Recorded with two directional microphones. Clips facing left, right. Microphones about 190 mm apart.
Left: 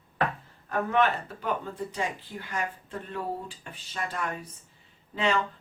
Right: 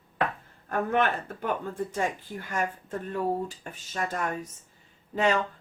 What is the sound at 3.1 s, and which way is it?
A woman's voice, 45° right (ahead or behind).